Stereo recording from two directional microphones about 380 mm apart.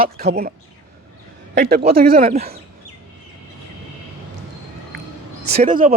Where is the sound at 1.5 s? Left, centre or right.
Right.